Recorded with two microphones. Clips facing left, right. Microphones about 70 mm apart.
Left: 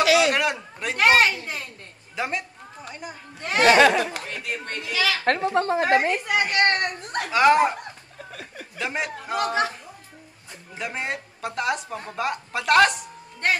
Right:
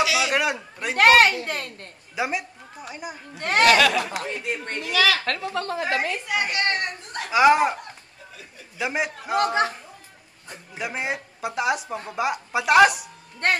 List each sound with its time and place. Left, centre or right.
0.0 s a sound: left
0.3 s a woman's voice: centre
0.9 s a woman's voice: right
2.1 s a woman's voice: centre
3.3 s speech: right
3.6 s speech: left
4.3 s speech: right
4.9 s a woman's voice: right
5.2 s a woman's voice: left
7.2 s a woman's voice: centre
8.2 s chuckle: left
8.7 s a woman's voice: centre
10.8 s a woman's voice: centre